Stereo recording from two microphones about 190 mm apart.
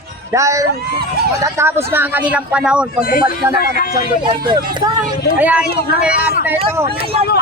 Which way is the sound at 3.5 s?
50° left (ahead or behind).